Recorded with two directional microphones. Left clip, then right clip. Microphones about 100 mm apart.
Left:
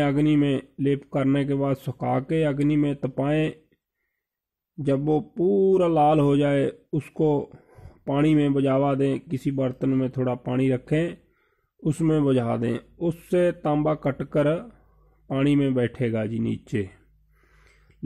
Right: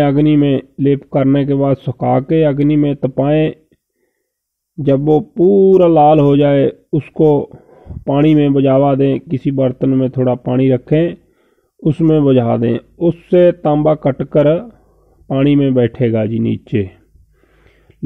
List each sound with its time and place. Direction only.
0.0 s speech: 30° right (ahead or behind)
4.8 s speech: 35° right (ahead or behind)
7.5 s a sound: 20° right (ahead or behind)
8.0 s speech: 35° right (ahead or behind)